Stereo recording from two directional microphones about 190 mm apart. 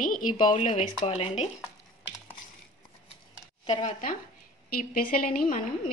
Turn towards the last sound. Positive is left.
turn(degrees=45)  # may be behind; listen again after turning